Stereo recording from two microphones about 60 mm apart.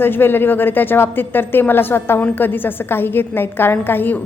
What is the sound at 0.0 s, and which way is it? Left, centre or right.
A woman's voice, left.